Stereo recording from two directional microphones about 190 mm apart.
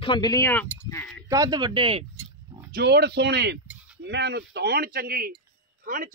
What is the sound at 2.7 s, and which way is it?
Speech, 60° right (ahead or behind).